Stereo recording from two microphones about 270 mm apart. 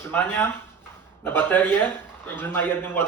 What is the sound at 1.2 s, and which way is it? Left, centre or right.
A man's voice, centre.